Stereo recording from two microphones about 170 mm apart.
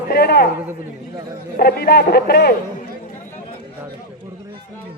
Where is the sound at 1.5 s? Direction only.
70° left (ahead or behind).